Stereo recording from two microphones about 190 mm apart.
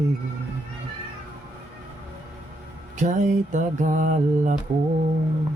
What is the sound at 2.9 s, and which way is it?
Mantra, 40° right (ahead or behind).